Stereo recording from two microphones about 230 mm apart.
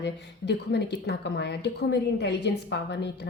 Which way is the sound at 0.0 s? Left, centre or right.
Left.